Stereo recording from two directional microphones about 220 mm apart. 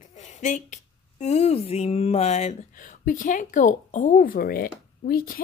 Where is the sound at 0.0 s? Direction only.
35° left (ahead or behind).